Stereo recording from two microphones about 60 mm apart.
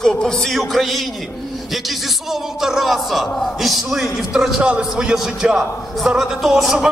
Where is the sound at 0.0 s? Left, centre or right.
Centre.